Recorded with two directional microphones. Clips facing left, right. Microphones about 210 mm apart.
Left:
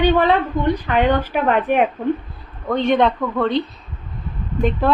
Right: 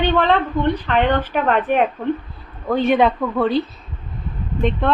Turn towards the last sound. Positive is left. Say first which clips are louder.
# left 1 dB
turn(degrees=5)  # may be behind; listen again after turning